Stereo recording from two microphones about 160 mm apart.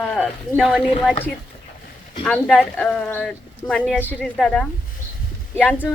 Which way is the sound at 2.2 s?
5° left (ahead or behind).